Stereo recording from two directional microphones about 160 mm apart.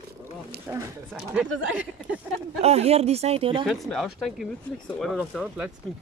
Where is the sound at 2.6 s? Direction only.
40° right (ahead or behind).